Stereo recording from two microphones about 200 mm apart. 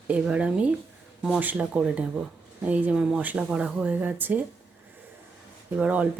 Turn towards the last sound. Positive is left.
turn(degrees=-5)  # may be behind; listen again after turning